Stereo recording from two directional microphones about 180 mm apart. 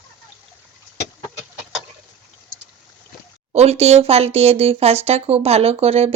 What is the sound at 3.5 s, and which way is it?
Speech, 35° right (ahead or behind).